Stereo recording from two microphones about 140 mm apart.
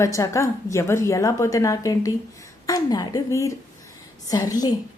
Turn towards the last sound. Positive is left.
turn(degrees=25)  # may be behind; listen again after turning